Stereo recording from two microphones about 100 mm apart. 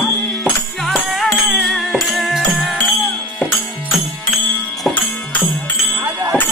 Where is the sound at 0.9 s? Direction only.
Centre (ahead or behind).